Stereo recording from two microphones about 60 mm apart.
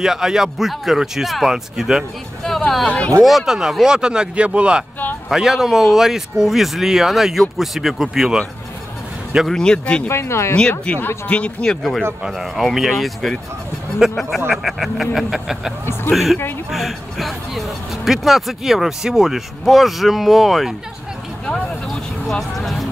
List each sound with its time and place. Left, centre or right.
0.0 s speech: centre
2.9 s speech: centre
3.3 s speech: centre
5.3 s speech: centre
9.5 s speech: centre
10.0 s speech: left
10.9 s speech: centre
11.6 s speech: centre
15.8 s speech: left
16.1 s speech: centre
21.8 s vehicle: centre